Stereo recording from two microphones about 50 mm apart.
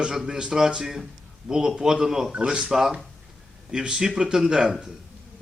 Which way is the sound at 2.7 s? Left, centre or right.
Centre.